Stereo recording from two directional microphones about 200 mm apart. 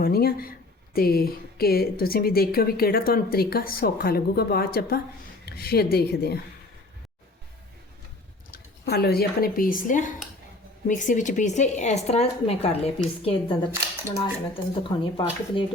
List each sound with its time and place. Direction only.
0.0 s a woman's voice: 50° left (ahead or behind)
8.4 s speech: 50° left (ahead or behind); by 15.6 s 25° left (ahead or behind)